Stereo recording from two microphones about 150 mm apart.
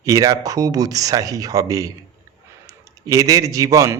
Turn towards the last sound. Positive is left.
turn(degrees=-20)  # may be behind; listen again after turning